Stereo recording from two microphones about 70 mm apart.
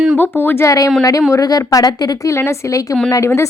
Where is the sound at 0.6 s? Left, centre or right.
Left.